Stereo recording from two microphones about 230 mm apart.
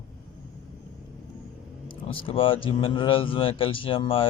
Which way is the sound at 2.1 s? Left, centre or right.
Left.